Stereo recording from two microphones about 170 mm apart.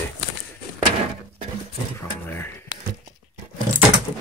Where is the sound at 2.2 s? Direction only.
15° left (ahead or behind).